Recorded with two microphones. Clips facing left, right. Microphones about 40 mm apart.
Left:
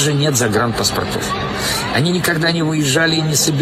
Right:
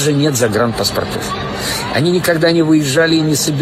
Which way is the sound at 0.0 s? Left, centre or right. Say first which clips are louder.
Right 3 dB; left.